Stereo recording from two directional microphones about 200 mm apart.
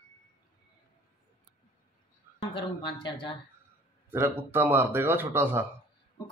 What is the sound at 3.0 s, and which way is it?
Speech, 25° left (ahead or behind).